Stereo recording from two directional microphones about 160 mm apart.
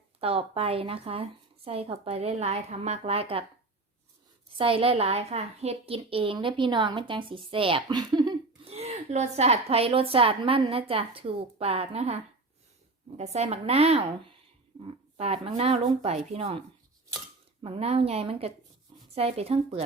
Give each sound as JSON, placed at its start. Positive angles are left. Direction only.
{"t": 0.2, "sound": "a woman's voice", "side_deg": -35}
{"t": 4.5, "sound": "a woman's voice", "side_deg": -35}
{"t": 8.7, "sound": "a woman's voice", "side_deg": -45}